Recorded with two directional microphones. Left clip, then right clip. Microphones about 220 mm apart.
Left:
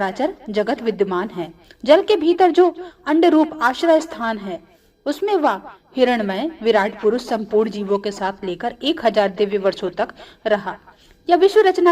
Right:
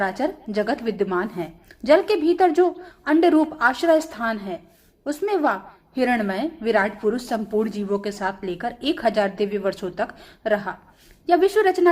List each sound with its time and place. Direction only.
0.2 s a woman's voice: 30° left (ahead or behind)